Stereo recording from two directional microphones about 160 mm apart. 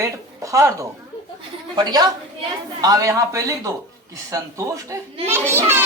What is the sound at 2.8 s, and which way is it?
A child's voice, 20° right (ahead or behind).